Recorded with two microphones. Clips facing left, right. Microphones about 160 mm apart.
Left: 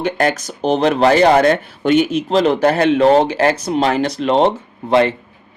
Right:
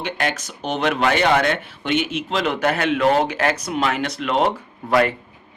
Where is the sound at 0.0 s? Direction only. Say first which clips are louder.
Left 7 dB; 40° left (ahead or behind).